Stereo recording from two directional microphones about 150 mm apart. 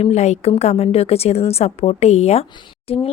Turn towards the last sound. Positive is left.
turn(degrees=40)  # may be behind; listen again after turning